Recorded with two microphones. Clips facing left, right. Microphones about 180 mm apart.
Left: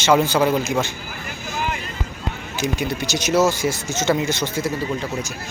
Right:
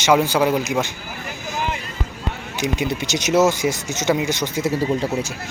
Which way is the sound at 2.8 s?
20° right (ahead or behind).